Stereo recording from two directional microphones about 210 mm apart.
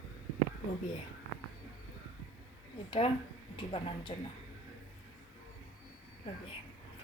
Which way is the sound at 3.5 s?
25° left (ahead or behind).